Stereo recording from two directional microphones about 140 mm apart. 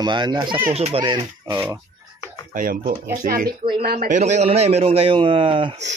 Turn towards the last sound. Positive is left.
turn(degrees=-35)  # may be behind; listen again after turning